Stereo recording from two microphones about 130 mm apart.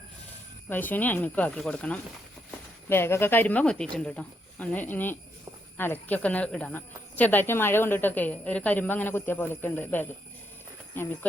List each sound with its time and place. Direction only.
0.7 s speech: 15° left (ahead or behind)